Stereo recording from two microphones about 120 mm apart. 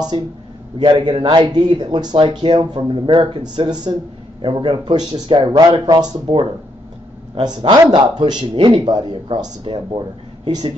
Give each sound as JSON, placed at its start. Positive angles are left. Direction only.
{"t": 0.1, "sound": "a man's voice", "side_deg": -40}